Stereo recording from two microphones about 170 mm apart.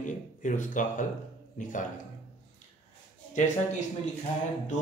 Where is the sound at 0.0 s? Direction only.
50° left (ahead or behind).